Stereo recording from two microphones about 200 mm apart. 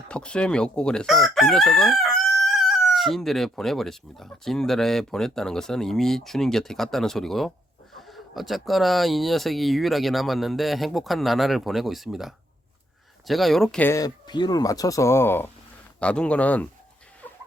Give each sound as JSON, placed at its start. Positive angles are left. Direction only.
{"t": 0.1, "sound": "crowing", "side_deg": 5}
{"t": 13.2, "sound": "speech", "side_deg": 0}
{"t": 17.2, "sound": "a sound", "side_deg": 5}